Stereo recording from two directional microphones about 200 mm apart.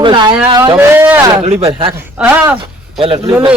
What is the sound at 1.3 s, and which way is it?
Speech, 30° right (ahead or behind).